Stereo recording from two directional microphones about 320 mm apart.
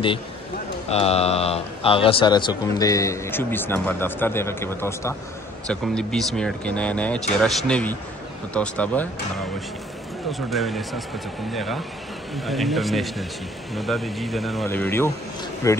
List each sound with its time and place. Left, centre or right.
0.8 s a man's voice: centre
10.5 s a man's voice: centre